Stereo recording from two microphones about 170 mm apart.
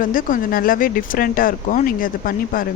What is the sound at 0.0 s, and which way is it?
Speech, 55° left (ahead or behind).